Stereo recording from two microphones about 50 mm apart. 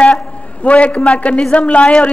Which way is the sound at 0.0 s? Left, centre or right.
Left.